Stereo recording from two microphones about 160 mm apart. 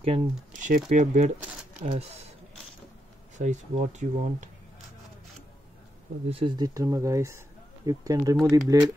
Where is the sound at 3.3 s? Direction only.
50° right (ahead or behind).